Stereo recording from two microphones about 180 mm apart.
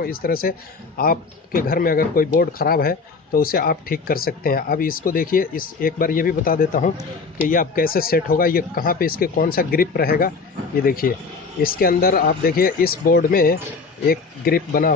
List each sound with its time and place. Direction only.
0.0 s a man's voice: 55° left (ahead or behind)